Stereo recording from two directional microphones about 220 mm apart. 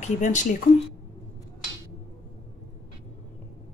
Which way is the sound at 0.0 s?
35° left (ahead or behind).